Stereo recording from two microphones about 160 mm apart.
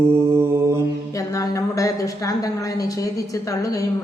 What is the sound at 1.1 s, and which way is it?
Speech, 20° left (ahead or behind).